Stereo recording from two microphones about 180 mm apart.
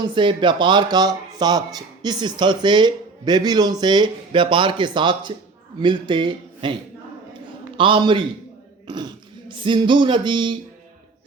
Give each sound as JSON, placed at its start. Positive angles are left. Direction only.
{"t": 0.0, "sound": "speech", "side_deg": -25}
{"t": 7.8, "sound": "speech", "side_deg": -30}